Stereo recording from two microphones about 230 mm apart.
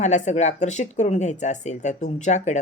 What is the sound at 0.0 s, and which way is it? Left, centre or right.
Speech, left.